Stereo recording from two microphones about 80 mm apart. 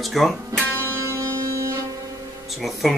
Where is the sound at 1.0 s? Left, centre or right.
Right.